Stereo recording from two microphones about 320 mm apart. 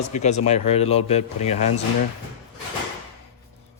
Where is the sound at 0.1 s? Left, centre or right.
Left.